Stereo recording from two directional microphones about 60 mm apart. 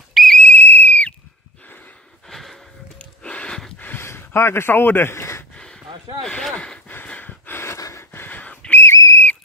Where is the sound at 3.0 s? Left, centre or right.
Left.